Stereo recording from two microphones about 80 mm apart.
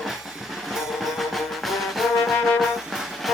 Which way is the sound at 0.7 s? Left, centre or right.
Centre.